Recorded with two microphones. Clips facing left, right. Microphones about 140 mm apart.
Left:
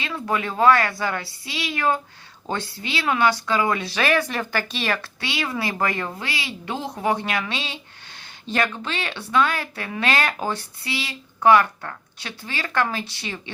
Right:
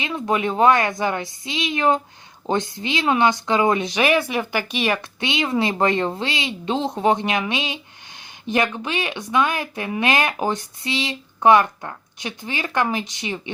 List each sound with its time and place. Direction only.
0.0 s speech: 20° right (ahead or behind)